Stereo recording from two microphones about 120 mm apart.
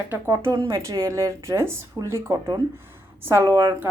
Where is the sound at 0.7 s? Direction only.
25° right (ahead or behind).